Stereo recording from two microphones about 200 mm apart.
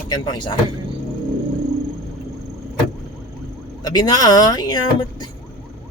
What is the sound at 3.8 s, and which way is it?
Speech, 20° left (ahead or behind).